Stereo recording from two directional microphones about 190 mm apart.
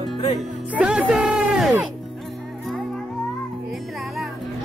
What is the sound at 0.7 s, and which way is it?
Speech, 5° right (ahead or behind).